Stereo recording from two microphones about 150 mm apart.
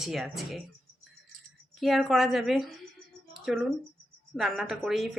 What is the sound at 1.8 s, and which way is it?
A woman's voice, centre (ahead or behind).